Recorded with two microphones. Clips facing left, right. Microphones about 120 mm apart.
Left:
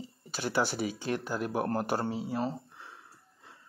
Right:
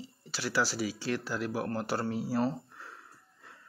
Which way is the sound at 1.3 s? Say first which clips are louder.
Left 2 dB; 45° left (ahead or behind).